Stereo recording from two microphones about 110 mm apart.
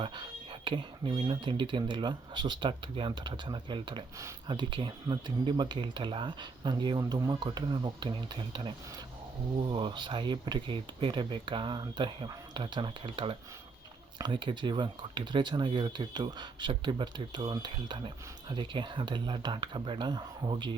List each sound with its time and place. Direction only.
0.0 s speech: 45° right (ahead or behind)